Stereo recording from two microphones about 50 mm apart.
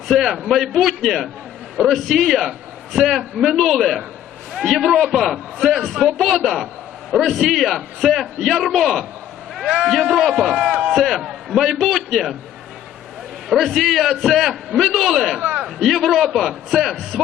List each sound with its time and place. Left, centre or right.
0.1 s speech: centre
0.4 s a man's voice: centre
10.2 s a man's voice: centre
10.5 s speech: centre
10.9 s a man's voice: centre
13.5 s a man's voice: centre